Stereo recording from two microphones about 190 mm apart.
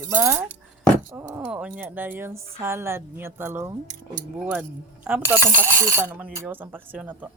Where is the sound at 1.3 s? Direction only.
5° right (ahead or behind).